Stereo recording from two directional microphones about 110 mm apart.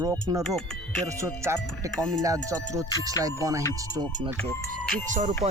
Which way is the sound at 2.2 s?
30° right (ahead or behind).